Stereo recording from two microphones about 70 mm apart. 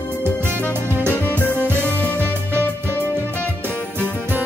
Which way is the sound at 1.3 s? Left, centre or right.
Left.